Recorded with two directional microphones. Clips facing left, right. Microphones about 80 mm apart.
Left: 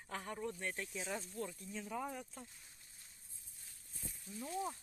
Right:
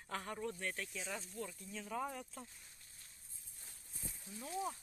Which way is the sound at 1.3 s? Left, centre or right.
Left.